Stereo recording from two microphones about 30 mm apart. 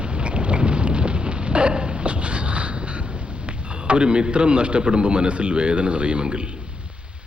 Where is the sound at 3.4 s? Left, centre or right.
Right.